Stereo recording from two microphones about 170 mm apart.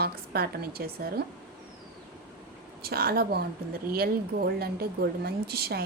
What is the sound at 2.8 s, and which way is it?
A woman's voice, 65° right (ahead or behind).